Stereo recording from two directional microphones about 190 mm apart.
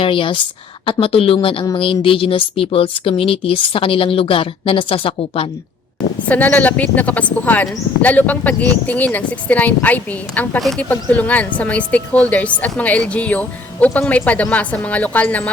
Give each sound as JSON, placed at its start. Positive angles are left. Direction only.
{"t": 0.0, "sound": "a woman's voice", "side_deg": 25}
{"t": 6.2, "sound": "a woman's voice", "side_deg": 10}